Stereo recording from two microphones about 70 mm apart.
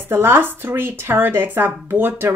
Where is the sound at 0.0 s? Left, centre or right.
Right.